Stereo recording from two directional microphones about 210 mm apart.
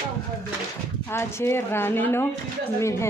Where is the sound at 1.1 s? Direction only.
10° left (ahead or behind).